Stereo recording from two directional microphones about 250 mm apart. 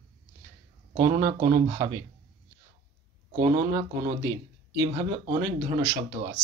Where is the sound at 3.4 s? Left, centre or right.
Centre.